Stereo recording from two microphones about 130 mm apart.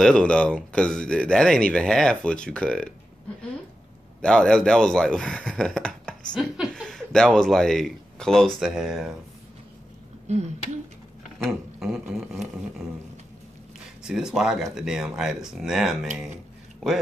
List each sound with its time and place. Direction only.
0.0 s speech: 5° left (ahead or behind)
4.2 s speech: 5° left (ahead or behind)
6.4 s speech: 5° right (ahead or behind)
6.7 s speech: 5° left (ahead or behind)
10.2 s speech: 60° right (ahead or behind)
11.3 s speech: centre (ahead or behind)
14.0 s speech: 5° right (ahead or behind)